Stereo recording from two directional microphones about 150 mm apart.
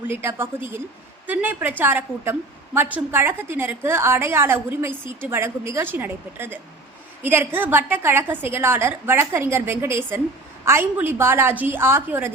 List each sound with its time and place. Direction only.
0.1 s a woman's voice: 15° right (ahead or behind)